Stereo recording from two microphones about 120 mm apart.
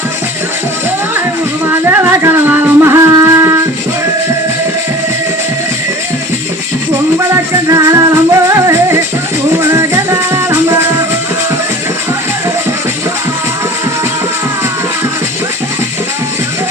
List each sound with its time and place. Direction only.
1.6 s music: 20° right (ahead or behind)
7.2 s music: 25° right (ahead or behind)